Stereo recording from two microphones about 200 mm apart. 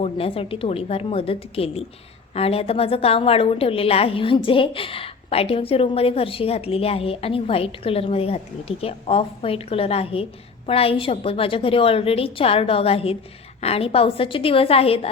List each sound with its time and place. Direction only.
0.0 s a woman's voice: 30° left (ahead or behind)